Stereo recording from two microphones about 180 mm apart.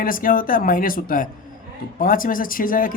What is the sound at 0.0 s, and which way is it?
Speech, 50° left (ahead or behind).